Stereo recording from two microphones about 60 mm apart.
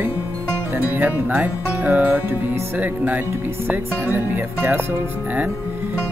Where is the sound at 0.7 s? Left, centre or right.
Right.